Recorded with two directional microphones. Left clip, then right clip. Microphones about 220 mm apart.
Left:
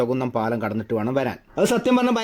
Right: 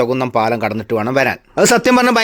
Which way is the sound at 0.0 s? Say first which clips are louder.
Right 8 dB; 15° right (ahead or behind).